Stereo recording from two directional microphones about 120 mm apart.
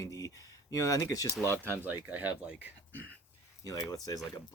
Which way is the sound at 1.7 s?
15° right (ahead or behind).